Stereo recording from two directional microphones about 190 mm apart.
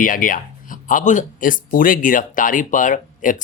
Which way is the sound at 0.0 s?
45° left (ahead or behind).